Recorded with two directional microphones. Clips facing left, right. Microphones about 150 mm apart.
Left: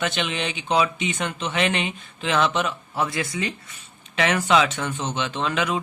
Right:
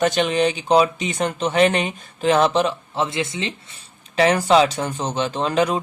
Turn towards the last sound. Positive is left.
turn(degrees=-35)  # may be behind; listen again after turning